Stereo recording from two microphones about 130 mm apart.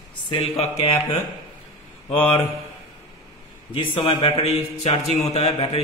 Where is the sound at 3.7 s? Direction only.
40° left (ahead or behind).